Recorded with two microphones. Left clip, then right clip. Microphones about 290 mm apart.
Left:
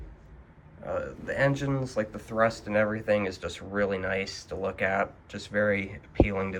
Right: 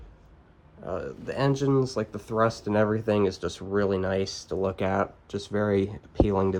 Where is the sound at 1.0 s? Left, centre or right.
Centre.